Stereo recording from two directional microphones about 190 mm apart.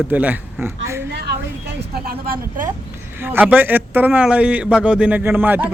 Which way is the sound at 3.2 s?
10° right (ahead or behind).